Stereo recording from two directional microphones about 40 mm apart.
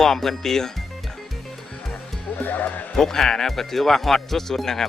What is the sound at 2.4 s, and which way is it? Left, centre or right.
Speech, left.